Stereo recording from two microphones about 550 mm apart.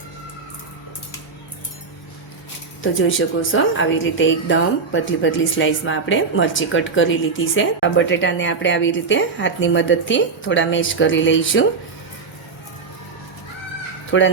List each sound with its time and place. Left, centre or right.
2.8 s a woman's voice: left
14.1 s a woman's voice: left